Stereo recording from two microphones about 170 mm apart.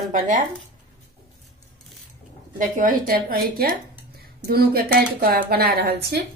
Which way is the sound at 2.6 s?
55° right (ahead or behind).